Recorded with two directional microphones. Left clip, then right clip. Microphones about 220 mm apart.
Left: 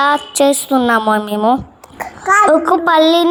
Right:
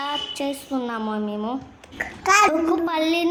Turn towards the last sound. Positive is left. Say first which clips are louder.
# left 11 dB
turn(degrees=30)  # may be behind; listen again after turning